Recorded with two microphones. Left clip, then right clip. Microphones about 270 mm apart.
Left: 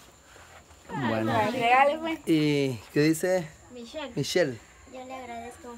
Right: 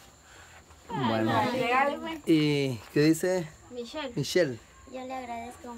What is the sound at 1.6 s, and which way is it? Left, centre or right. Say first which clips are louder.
Speech: left 5 dB; left.